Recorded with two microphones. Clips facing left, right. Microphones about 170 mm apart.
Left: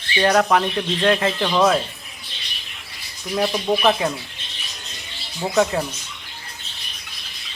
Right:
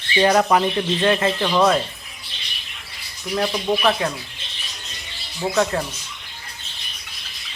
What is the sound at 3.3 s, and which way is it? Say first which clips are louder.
Speech: left 1 dB; 10° left (ahead or behind).